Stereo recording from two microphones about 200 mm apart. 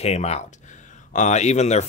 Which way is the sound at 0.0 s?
30° left (ahead or behind).